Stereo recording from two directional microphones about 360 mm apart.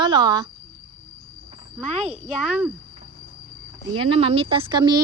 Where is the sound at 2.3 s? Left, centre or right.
Centre.